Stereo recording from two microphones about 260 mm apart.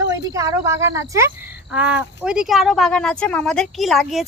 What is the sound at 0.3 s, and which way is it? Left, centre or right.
A woman's voice, centre.